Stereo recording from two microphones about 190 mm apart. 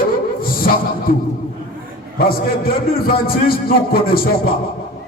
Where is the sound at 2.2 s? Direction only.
50° left (ahead or behind).